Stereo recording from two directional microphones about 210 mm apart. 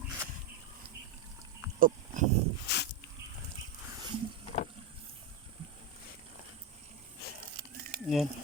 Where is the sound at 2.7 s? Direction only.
50° left (ahead or behind).